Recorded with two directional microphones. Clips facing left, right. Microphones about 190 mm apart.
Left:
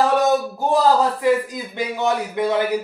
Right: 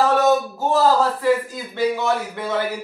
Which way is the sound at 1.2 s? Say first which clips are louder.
Left 1 dB; 15° left (ahead or behind).